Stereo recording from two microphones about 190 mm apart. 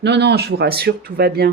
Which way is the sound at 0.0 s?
65° right (ahead or behind).